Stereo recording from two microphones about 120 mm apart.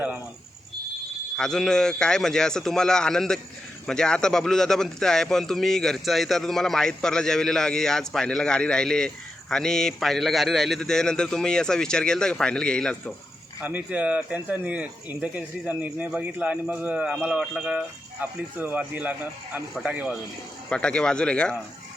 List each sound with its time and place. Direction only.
1.4 s a man's voice: 5° left (ahead or behind)
13.6 s speech: 15° right (ahead or behind)
20.7 s speech: 5° left (ahead or behind)